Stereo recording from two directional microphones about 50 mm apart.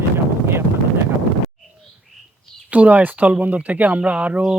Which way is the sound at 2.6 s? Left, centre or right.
Right.